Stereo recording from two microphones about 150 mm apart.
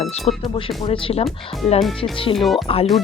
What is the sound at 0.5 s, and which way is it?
Speech, 35° left (ahead or behind).